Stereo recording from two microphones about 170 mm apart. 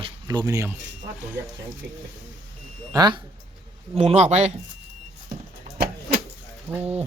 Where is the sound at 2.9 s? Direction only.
25° right (ahead or behind).